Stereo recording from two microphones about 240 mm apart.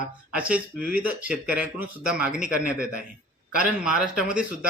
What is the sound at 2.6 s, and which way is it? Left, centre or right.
Speech, right.